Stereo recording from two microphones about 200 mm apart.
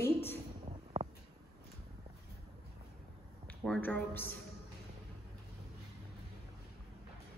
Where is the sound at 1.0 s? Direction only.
30° right (ahead or behind).